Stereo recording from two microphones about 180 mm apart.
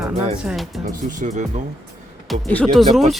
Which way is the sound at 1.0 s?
45° right (ahead or behind).